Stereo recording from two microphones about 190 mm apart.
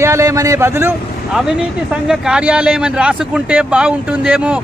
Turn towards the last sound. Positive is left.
turn(degrees=-5)  # may be behind; listen again after turning